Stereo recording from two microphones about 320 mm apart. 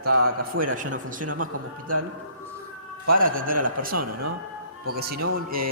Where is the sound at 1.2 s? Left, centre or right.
Right.